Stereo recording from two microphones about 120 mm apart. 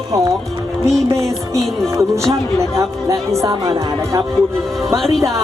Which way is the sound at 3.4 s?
30° right (ahead or behind).